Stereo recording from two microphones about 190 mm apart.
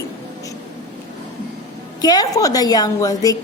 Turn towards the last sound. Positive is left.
turn(degrees=20)  # may be behind; listen again after turning